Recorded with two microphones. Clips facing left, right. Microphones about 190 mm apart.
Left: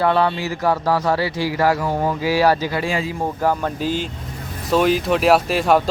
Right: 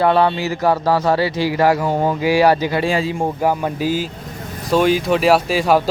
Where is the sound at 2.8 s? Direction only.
30° right (ahead or behind).